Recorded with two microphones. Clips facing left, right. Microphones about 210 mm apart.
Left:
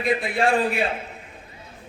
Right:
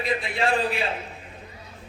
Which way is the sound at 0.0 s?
50° left (ahead or behind).